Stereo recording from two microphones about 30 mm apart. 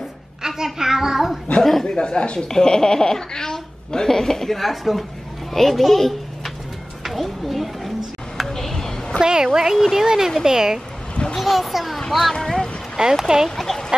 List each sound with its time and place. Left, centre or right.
0.4 s a sound: centre
1.6 s speech: centre
2.0 s speech: left
2.4 s a woman's voice: left
4.6 s a child's voice: centre
7.0 s a sound: centre
8.5 s a sound: centre
9.2 s a woman's voice: right
9.8 s a child's voice: centre
10.0 s a woman's voice: centre
11.3 s a child's voice: centre
12.4 s speech: centre
13.0 s a woman's voice: right
13.6 s speech: centre